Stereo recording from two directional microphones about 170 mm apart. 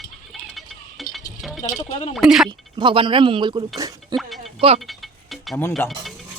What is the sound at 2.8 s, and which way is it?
Speech, 30° right (ahead or behind).